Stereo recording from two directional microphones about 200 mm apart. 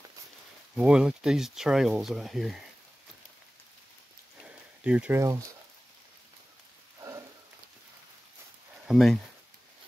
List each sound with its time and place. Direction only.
0.7 s speech: 5° right (ahead or behind)
4.8 s speech: 5° right (ahead or behind)
7.0 s rain on surface: 15° right (ahead or behind)
8.8 s speech: centre (ahead or behind)